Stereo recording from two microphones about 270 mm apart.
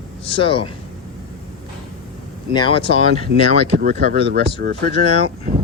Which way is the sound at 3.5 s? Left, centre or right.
Right.